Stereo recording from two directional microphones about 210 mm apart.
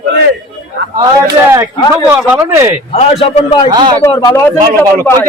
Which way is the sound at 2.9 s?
30° left (ahead or behind).